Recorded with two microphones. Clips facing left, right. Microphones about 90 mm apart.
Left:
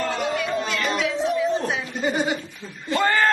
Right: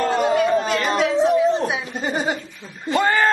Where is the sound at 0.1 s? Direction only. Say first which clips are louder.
Right 7 dB; 45° right (ahead or behind).